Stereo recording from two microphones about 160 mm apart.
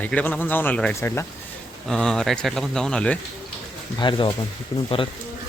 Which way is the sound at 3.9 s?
30° left (ahead or behind).